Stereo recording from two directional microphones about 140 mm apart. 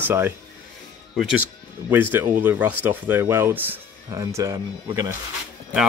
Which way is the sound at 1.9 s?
15° right (ahead or behind).